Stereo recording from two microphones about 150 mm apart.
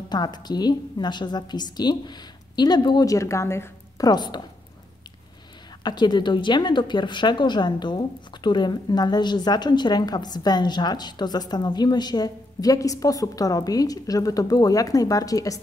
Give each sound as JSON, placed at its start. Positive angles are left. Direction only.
{"t": 0.1, "sound": "a woman's voice", "side_deg": 25}
{"t": 4.1, "sound": "a woman's voice", "side_deg": 30}
{"t": 5.9, "sound": "a woman's voice", "side_deg": 30}